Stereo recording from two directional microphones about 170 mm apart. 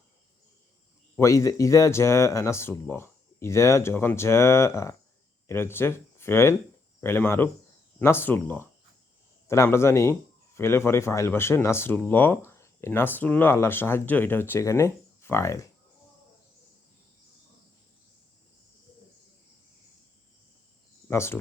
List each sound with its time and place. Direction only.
1.1 s speech: 20° left (ahead or behind)
21.1 s speech: 15° left (ahead or behind)